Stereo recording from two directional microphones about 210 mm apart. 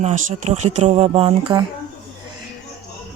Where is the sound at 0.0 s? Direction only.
35° right (ahead or behind).